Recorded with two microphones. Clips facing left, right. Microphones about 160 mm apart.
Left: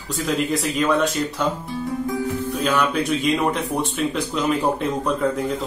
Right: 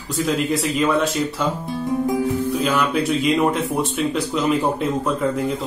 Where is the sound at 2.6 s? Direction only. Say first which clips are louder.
Left 2 dB; centre (ahead or behind).